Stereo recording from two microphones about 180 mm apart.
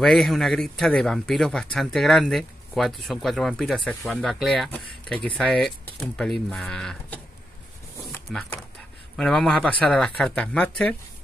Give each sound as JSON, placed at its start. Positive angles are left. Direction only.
{"t": 0.0, "sound": "speech", "side_deg": 0}
{"t": 8.3, "sound": "speech", "side_deg": 5}